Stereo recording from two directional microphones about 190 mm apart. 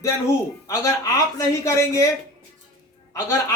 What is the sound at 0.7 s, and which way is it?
Speech, 15° left (ahead or behind).